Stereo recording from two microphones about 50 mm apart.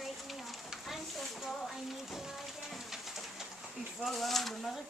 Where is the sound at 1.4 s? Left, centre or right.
Centre.